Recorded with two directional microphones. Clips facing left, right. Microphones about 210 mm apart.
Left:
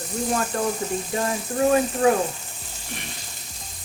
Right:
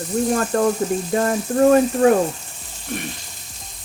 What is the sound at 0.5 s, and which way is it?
Speech, 60° right (ahead or behind).